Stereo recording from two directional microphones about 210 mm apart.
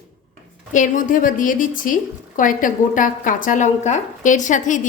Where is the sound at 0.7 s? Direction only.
40° left (ahead or behind).